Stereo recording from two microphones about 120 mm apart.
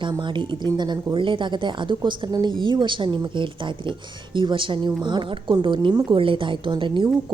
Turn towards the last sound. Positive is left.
turn(degrees=-40)  # may be behind; listen again after turning